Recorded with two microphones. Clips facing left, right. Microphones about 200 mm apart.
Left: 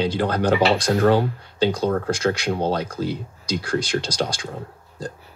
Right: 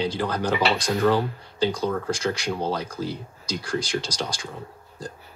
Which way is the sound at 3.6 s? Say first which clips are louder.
Left 3 dB; 55° left (ahead or behind).